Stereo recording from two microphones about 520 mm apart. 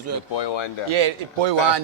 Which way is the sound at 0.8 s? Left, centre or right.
Right.